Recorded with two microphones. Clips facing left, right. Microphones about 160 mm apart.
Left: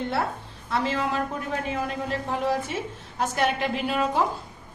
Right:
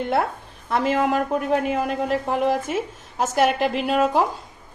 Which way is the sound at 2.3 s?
50° right (ahead or behind).